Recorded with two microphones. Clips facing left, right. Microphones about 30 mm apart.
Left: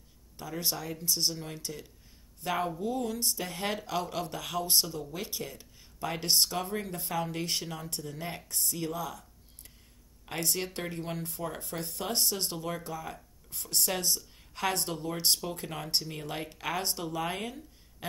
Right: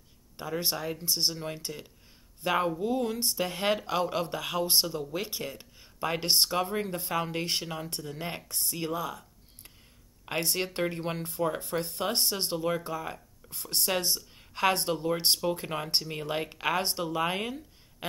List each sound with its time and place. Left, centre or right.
0.4 s speech: right
3.8 s speech: right
10.2 s speech: right